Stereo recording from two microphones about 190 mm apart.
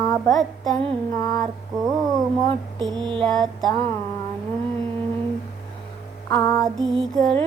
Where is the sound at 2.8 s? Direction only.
25° right (ahead or behind).